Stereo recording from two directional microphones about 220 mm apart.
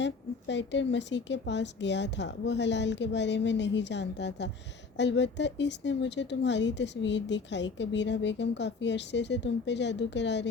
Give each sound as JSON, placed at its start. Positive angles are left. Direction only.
{"t": 0.0, "sound": "a woman's voice", "side_deg": 55}